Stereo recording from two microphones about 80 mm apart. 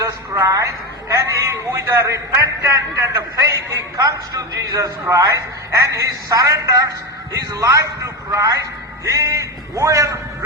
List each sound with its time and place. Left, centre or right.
0.0 s a man's voice: right